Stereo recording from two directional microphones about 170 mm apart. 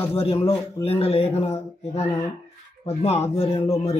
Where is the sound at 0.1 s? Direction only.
35° left (ahead or behind).